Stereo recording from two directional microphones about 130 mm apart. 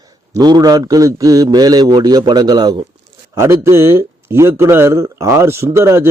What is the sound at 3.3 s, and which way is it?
Speech, 20° right (ahead or behind).